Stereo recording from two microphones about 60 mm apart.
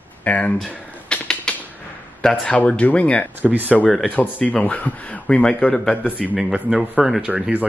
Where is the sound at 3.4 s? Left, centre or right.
Right.